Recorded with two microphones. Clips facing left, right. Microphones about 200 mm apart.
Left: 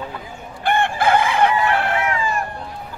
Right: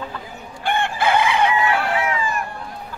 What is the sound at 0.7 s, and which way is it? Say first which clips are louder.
Chicken: left 2 dB; 55° left (ahead or behind).